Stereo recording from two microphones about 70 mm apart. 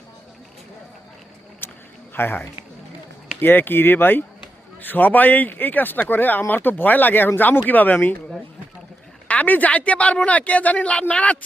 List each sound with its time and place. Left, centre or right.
1.6 s a sound: left
2.1 s a man's voice: left
9.2 s speech: left